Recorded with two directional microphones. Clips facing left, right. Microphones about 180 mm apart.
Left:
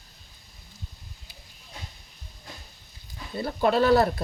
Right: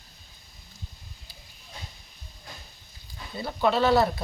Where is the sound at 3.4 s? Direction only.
50° left (ahead or behind).